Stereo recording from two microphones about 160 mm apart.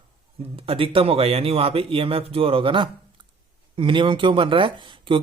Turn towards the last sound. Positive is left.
turn(degrees=-30)  # may be behind; listen again after turning